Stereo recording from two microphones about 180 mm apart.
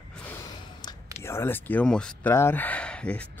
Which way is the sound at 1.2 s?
15° left (ahead or behind).